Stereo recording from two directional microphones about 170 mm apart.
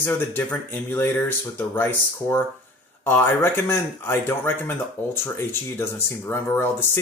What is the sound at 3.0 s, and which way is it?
Speech, 15° left (ahead or behind).